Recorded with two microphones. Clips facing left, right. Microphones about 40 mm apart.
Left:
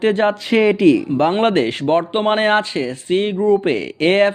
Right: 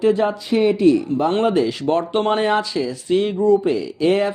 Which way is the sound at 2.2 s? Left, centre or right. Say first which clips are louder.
Left 3 dB; left.